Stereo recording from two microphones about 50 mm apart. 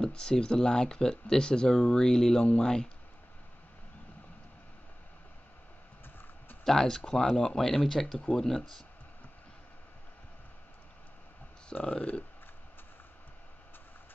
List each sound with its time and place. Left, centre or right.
0.0 s speech: centre
6.6 s speech: centre
11.7 s speech: left